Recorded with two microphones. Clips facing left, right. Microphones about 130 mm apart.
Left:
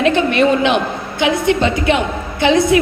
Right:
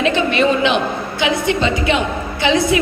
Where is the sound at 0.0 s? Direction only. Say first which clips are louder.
Left 2 dB; 55° left (ahead or behind).